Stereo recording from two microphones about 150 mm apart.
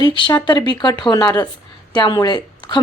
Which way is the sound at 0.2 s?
30° left (ahead or behind).